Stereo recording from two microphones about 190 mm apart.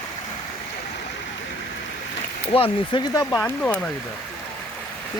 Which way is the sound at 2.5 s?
25° left (ahead or behind).